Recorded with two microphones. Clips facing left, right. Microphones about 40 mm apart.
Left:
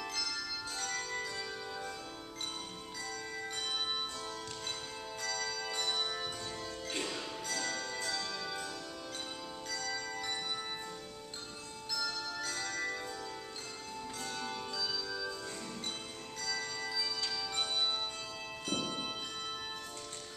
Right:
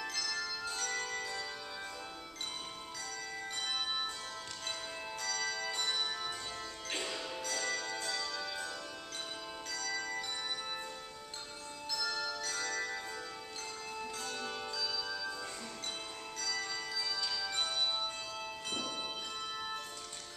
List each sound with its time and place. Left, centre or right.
0.7 s music: centre
5.3 s bell: centre
5.6 s music: centre
7.1 s music: centre
9.7 s bell: centre
12.4 s music: centre
14.2 s music: centre
17.3 s music: centre